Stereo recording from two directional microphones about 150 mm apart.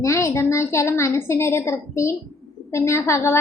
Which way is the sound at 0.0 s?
20° left (ahead or behind).